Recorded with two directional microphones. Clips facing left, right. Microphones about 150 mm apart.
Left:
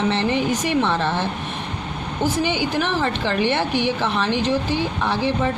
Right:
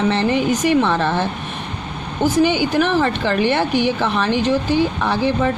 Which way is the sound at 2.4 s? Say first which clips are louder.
Right 5 dB; 55° right (ahead or behind).